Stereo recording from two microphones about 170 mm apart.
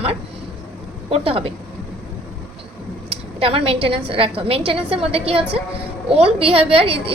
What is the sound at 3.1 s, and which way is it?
A woman's voice, 35° right (ahead or behind).